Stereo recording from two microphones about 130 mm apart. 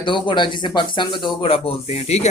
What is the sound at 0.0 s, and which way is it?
Speech, 40° left (ahead or behind).